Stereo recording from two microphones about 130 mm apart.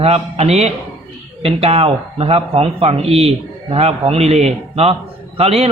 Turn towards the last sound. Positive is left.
turn(degrees=-50)  # may be behind; listen again after turning